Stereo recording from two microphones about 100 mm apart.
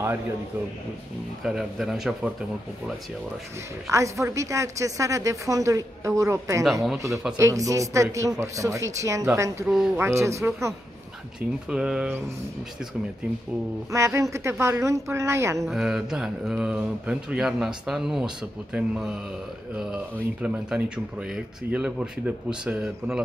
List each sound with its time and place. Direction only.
1.4 s speech: 5° right (ahead or behind)
3.9 s a woman's voice: 30° right (ahead or behind)
6.6 s speech: centre (ahead or behind)
7.3 s a woman's voice: 30° right (ahead or behind)
11.7 s speech: 5° right (ahead or behind)
13.9 s a woman's voice: 30° right (ahead or behind)
15.6 s speech: 5° right (ahead or behind)